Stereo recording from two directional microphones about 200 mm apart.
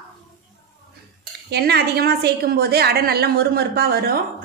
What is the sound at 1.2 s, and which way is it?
Speech, 55° right (ahead or behind).